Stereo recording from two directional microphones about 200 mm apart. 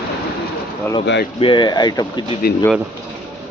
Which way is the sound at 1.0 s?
60° left (ahead or behind).